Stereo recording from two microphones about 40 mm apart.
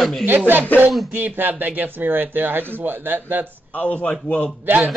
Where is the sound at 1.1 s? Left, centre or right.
Right.